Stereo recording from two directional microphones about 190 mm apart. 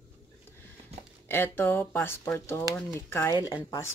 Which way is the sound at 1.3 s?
10° left (ahead or behind).